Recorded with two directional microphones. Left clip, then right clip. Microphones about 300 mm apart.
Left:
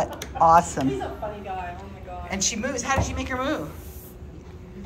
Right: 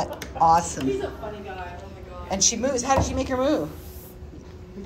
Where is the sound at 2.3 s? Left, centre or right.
Centre.